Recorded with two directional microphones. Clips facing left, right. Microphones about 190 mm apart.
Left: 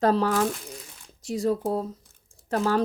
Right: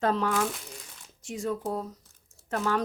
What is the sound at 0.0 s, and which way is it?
Speech, 35° left (ahead or behind).